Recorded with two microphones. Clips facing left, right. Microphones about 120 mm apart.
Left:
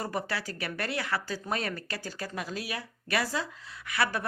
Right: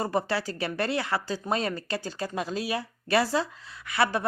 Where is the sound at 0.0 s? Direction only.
25° right (ahead or behind).